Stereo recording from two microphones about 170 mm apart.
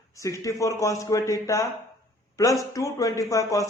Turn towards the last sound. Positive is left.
turn(degrees=20)  # may be behind; listen again after turning